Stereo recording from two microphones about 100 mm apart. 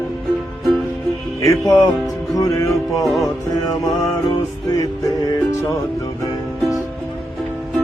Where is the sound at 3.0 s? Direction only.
Centre (ahead or behind).